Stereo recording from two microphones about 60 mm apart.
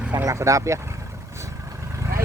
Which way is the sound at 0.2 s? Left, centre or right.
Right.